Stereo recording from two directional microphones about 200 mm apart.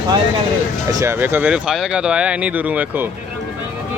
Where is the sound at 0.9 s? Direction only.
15° right (ahead or behind).